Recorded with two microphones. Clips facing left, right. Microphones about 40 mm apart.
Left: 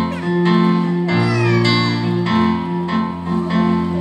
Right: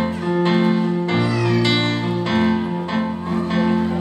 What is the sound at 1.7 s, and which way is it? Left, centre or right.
Music, right.